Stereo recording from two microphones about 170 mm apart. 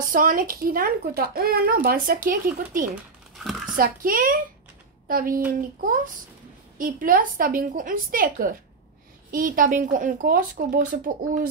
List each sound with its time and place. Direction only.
0.0 s speech: 55° right (ahead or behind)
3.3 s a sound: centre (ahead or behind)
3.7 s speech: 55° right (ahead or behind)